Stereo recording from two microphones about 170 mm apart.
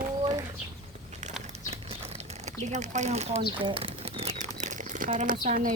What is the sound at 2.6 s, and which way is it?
Speech, 45° right (ahead or behind).